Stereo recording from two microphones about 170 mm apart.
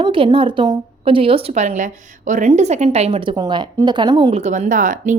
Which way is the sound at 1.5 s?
45° right (ahead or behind).